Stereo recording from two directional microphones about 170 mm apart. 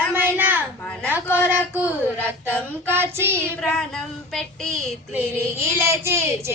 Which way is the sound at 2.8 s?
15° right (ahead or behind).